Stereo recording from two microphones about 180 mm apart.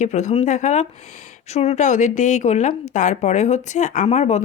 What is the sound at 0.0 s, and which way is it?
Speech, 40° left (ahead or behind).